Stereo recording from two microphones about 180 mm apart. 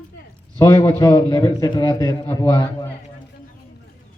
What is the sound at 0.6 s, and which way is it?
A man's voice, 20° left (ahead or behind).